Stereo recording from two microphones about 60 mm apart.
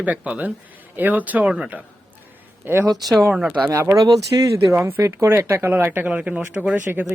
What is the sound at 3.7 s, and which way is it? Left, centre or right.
Speech, right.